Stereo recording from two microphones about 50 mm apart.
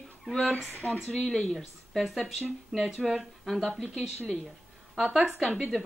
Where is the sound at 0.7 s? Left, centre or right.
Left.